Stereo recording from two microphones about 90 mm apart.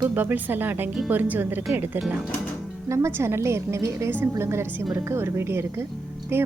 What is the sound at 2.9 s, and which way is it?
A woman's voice, 35° right (ahead or behind).